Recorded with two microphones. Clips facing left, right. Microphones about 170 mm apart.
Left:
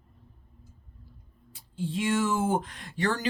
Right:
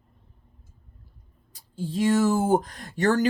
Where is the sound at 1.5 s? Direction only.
40° right (ahead or behind).